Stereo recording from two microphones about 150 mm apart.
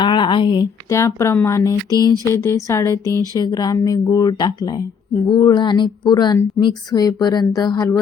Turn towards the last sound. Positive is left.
turn(degrees=25)  # may be behind; listen again after turning